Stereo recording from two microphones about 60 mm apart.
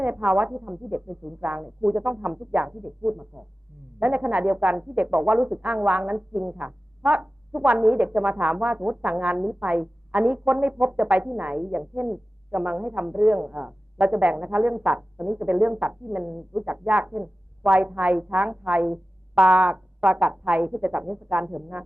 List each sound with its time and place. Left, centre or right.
0.0 s speech: right